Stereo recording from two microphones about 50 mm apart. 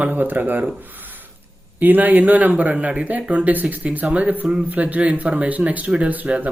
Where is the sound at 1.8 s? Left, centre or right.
Right.